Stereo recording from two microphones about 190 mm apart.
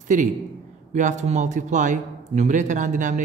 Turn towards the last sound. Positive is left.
turn(degrees=-40)  # may be behind; listen again after turning